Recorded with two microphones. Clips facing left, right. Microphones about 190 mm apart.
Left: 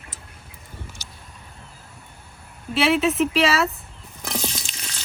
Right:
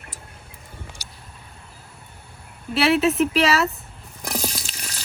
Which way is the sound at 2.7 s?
Centre (ahead or behind).